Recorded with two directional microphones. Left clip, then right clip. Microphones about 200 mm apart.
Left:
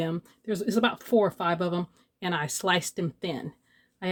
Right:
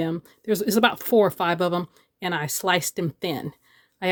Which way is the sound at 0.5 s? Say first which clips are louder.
Right 6 dB; 35° right (ahead or behind).